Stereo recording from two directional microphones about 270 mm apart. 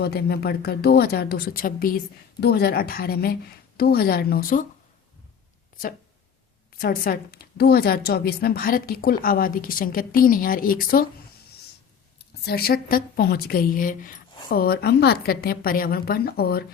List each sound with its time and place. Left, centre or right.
0.0 s a woman's voice: left
6.7 s a woman's voice: left
12.5 s a woman's voice: left